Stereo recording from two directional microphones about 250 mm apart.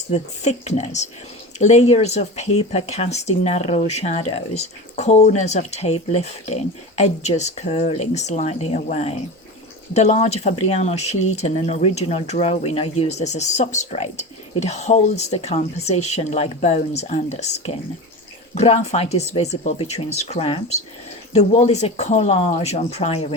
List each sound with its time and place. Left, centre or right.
0.1 s speech: left